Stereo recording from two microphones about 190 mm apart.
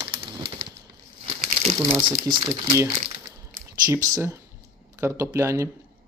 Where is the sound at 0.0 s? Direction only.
25° right (ahead or behind).